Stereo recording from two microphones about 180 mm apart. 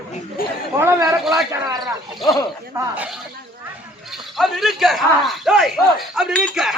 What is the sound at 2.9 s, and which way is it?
Speech, 10° right (ahead or behind).